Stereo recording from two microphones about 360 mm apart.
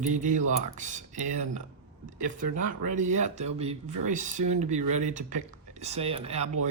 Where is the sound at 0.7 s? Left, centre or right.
Centre.